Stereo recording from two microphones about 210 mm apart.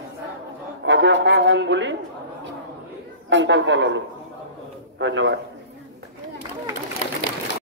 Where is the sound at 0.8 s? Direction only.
60° right (ahead or behind).